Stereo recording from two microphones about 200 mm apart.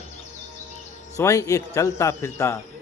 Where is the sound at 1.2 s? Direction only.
15° left (ahead or behind).